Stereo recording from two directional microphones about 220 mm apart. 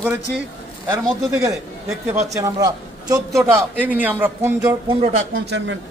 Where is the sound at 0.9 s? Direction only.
15° right (ahead or behind).